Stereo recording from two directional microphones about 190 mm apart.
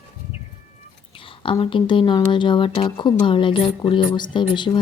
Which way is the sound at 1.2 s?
25° left (ahead or behind).